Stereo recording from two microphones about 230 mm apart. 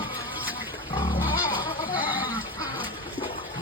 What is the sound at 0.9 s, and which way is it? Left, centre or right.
Pig, left.